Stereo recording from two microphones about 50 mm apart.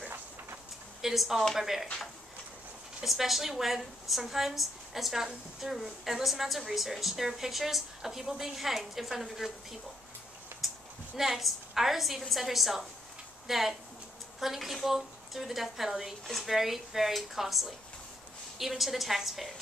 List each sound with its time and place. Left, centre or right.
1.0 s a woman's voice: centre
3.0 s a woman's voice: centre
10.5 s a sound: right
11.1 s a woman's voice: centre